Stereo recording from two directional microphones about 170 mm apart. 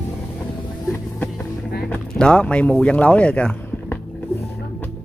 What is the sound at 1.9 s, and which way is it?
Speech, 5° left (ahead or behind).